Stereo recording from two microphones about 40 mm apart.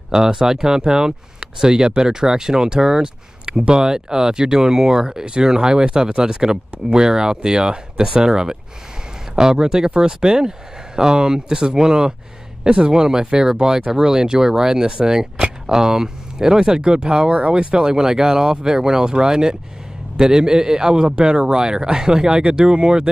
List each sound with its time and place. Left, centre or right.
0.1 s a man's voice: centre
17.3 s a man's voice: right